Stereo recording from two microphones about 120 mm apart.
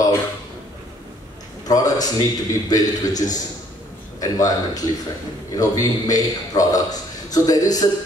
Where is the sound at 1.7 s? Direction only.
30° left (ahead or behind).